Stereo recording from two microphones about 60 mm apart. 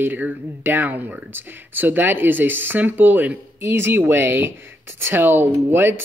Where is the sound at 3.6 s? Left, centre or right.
Right.